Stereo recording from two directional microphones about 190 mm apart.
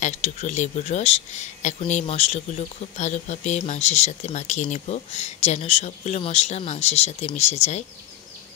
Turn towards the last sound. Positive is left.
turn(degrees=35)  # may be behind; listen again after turning